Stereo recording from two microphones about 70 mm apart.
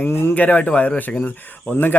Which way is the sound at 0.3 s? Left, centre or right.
Left.